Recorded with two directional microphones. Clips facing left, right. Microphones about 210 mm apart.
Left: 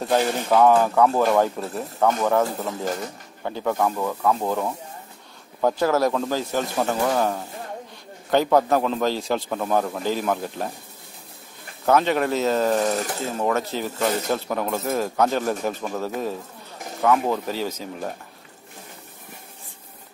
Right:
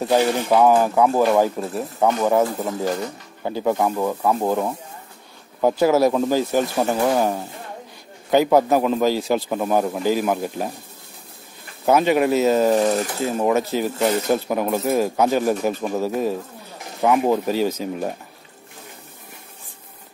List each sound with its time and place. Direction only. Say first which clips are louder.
0.0 s speech: right 3 dB; 10° right (ahead or behind)
11.8 s speech: right 3 dB; 10° right (ahead or behind)